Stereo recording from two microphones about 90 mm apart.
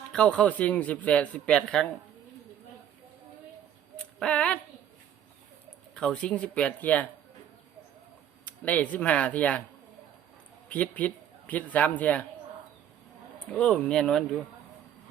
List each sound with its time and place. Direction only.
0.1 s speech: 10° left (ahead or behind)
3.9 s a sound: 10° left (ahead or behind)
5.9 s speech: 10° left (ahead or behind)
8.4 s speech: 15° left (ahead or behind)
10.7 s a man's voice: 15° left (ahead or behind)
13.5 s speech: 10° left (ahead or behind)